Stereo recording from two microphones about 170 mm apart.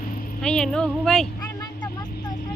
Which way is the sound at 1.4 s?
20° left (ahead or behind).